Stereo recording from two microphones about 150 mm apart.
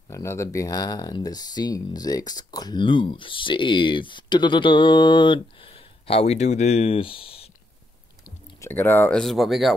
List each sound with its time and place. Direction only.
0.1 s speech: 20° left (ahead or behind); by 7.4 s 40° left (ahead or behind)
8.5 s speech: 15° left (ahead or behind)
9.2 s speech: centre (ahead or behind)